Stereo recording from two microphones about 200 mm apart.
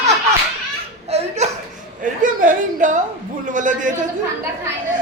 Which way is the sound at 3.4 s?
40° right (ahead or behind).